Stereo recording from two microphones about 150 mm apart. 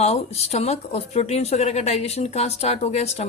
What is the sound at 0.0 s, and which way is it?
Speech, 45° left (ahead or behind).